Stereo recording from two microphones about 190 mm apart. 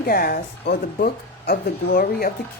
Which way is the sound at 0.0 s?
50° left (ahead or behind).